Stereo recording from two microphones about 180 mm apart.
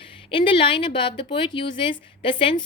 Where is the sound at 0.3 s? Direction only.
30° left (ahead or behind).